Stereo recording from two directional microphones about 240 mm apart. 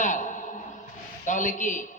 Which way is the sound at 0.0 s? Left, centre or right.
Left.